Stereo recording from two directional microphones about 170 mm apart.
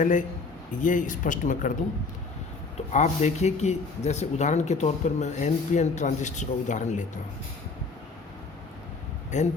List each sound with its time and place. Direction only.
0.0 s speech: 50° left (ahead or behind)
2.9 s speech: 45° left (ahead or behind)
9.3 s speech: 45° left (ahead or behind)